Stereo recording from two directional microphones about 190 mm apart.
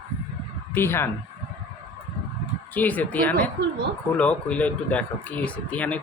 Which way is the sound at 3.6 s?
65° right (ahead or behind).